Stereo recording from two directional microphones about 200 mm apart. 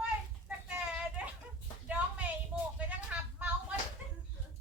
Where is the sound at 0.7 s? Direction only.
5° right (ahead or behind).